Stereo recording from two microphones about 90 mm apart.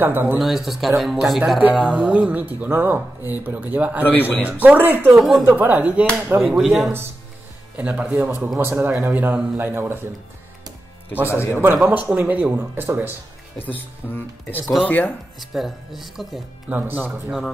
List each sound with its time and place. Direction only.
0.0 s speech: 20° right (ahead or behind)
0.4 s speech: centre (ahead or behind); by 4.0 s 20° right (ahead or behind)
4.0 s speech: 20° left (ahead or behind)
4.4 s speech: 15° right (ahead or behind)
6.4 s speech: centre (ahead or behind)
7.7 s speech: 15° right (ahead or behind)
11.2 s speech: 25° left (ahead or behind)
11.8 s speech: 20° right (ahead or behind)
13.6 s speech: 20° left (ahead or behind)
15.5 s speech: centre (ahead or behind)
16.6 s speech: 20° right (ahead or behind)